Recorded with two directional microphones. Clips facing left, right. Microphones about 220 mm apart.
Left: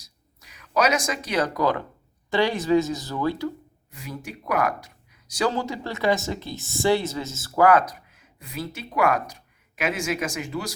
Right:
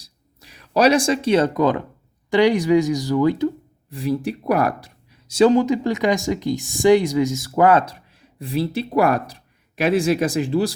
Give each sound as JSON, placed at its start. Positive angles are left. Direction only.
{"t": 0.0, "sound": "a sound", "side_deg": -30}
{"t": 2.3, "sound": "speech", "side_deg": -15}
{"t": 3.8, "sound": "speech", "side_deg": -35}